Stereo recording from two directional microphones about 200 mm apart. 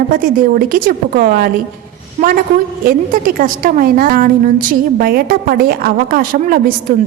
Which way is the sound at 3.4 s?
45° right (ahead or behind).